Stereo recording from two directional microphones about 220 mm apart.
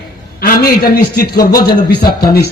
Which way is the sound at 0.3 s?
45° left (ahead or behind).